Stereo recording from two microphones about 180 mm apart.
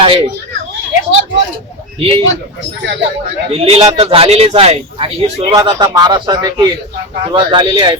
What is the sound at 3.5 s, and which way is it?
A man's voice, 35° right (ahead or behind).